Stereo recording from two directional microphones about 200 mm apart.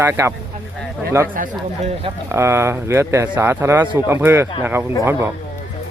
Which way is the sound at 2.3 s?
15° right (ahead or behind).